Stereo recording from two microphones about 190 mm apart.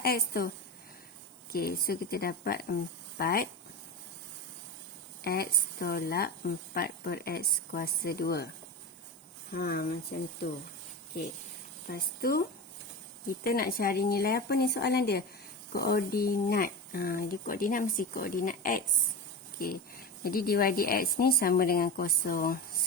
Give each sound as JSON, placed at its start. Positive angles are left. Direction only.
{"t": 0.0, "sound": "a woman's voice", "side_deg": 55}
{"t": 1.5, "sound": "a woman's voice", "side_deg": 55}
{"t": 5.2, "sound": "a woman's voice", "side_deg": 55}
{"t": 9.5, "sound": "a woman's voice", "side_deg": 50}
{"t": 11.9, "sound": "a woman's voice", "side_deg": 50}